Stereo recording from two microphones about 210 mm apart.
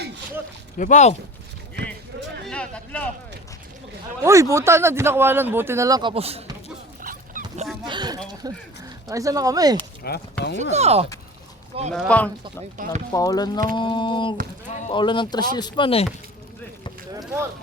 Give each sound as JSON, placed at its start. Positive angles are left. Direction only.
{"t": 0.8, "sound": "speech", "side_deg": 35}
{"t": 2.5, "sound": "a sound", "side_deg": 5}
{"t": 4.2, "sound": "speech", "side_deg": -15}
{"t": 7.0, "sound": "dog", "side_deg": -40}
{"t": 7.9, "sound": "a sound", "side_deg": -20}
{"t": 8.4, "sound": "speech", "side_deg": -20}
{"t": 10.0, "sound": "speech", "side_deg": 50}
{"t": 10.6, "sound": "speech", "side_deg": -30}
{"t": 11.9, "sound": "speech", "side_deg": 5}
{"t": 13.1, "sound": "speech", "side_deg": 15}
{"t": 17.1, "sound": "a sound", "side_deg": -15}